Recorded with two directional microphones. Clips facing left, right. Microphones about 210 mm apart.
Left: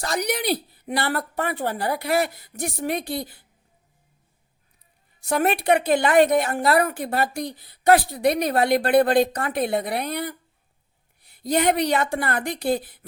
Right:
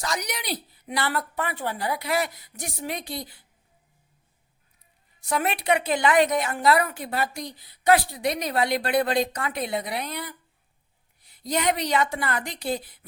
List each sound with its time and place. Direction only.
0.0 s a woman's voice: 55° left (ahead or behind)
5.3 s a woman's voice: 50° left (ahead or behind)
11.4 s a woman's voice: 55° left (ahead or behind)